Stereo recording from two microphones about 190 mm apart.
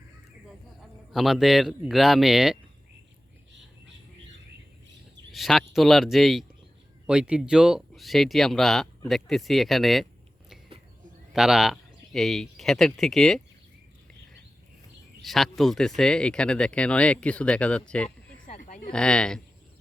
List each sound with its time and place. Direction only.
0.8 s speech: centre (ahead or behind)
5.3 s speech: centre (ahead or behind)
11.3 s speech: centre (ahead or behind)
15.2 s speech: centre (ahead or behind)
18.4 s a sound: 40° left (ahead or behind)
18.9 s speech: 5° left (ahead or behind)